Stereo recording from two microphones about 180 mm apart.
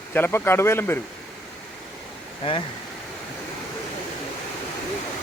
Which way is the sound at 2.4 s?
30° left (ahead or behind).